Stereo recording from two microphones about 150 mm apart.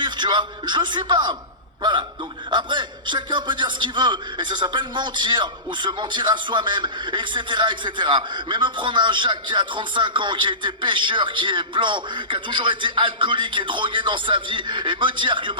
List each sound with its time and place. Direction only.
0.0 s a man's voice: 30° right (ahead or behind)